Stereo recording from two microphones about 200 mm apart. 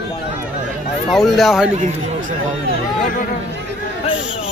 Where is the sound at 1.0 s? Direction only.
Centre (ahead or behind).